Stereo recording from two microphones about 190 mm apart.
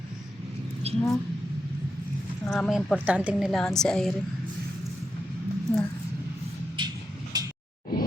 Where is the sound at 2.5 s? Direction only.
Centre (ahead or behind).